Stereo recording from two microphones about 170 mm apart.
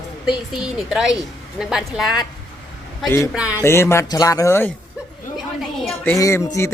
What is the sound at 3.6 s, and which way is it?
Speech, 15° left (ahead or behind).